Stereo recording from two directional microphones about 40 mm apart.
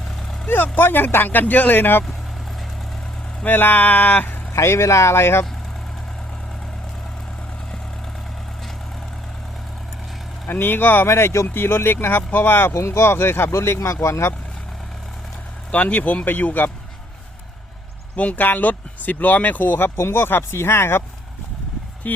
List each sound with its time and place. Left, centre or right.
0.4 s speech: left
3.4 s speech: left
4.7 s speech: left
10.4 s speech: left
11.4 s speech: left
15.7 s speech: left
18.2 s speech: left
20.1 s speech: left
22.0 s speech: left